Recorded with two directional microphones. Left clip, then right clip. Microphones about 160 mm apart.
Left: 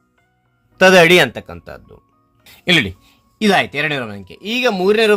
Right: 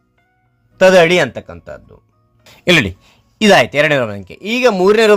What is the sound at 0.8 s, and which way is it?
Speech, centre (ahead or behind).